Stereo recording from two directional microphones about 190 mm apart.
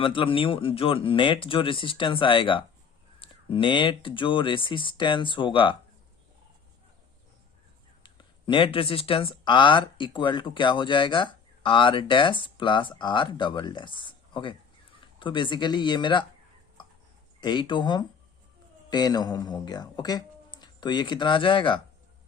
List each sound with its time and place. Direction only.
0.0 s speech: 25° left (ahead or behind)
8.0 s speech: 25° left (ahead or behind)
17.4 s speech: 25° left (ahead or behind)